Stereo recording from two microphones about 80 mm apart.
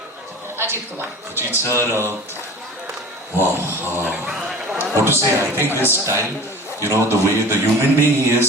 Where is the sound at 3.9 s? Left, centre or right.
Right.